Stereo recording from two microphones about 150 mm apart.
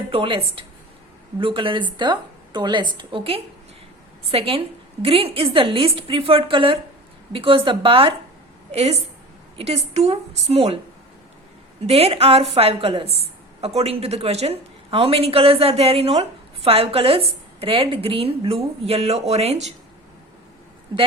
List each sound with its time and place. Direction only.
0.1 s a woman's voice: 40° right (ahead or behind)
11.9 s a woman's voice: 45° right (ahead or behind)